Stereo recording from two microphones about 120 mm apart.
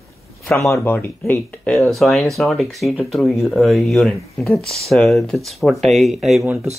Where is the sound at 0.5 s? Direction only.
25° left (ahead or behind).